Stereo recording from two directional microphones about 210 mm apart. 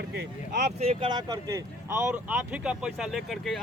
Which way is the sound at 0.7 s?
25° right (ahead or behind).